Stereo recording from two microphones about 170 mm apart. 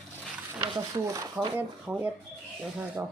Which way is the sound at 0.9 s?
20° right (ahead or behind).